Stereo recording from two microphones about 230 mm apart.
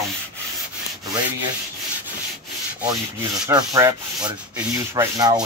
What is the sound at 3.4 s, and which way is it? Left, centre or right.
Sanding, centre.